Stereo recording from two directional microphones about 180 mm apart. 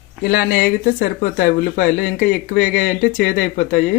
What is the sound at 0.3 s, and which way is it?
Speech, 60° left (ahead or behind).